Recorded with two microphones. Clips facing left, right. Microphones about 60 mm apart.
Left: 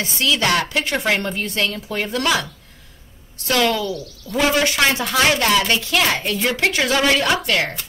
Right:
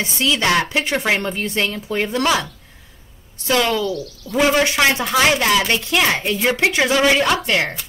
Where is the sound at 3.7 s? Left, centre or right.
Centre.